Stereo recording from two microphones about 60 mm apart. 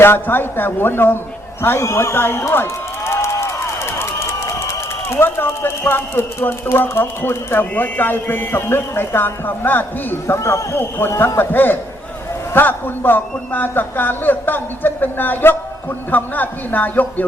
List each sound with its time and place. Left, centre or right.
0.0 s a man's voice: left
1.8 s a man's voice: left
10.3 s a man's voice: left